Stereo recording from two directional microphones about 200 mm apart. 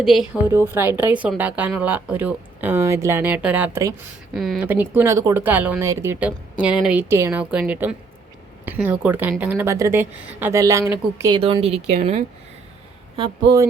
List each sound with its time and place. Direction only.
0.0 s a woman's voice: centre (ahead or behind)
4.4 s a woman's voice: centre (ahead or behind); by 12.2 s 30° right (ahead or behind)